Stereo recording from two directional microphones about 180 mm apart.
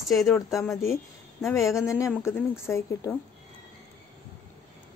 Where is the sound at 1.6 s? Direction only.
15° left (ahead or behind).